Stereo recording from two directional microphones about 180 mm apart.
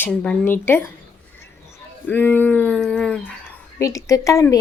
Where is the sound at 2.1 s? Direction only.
10° left (ahead or behind).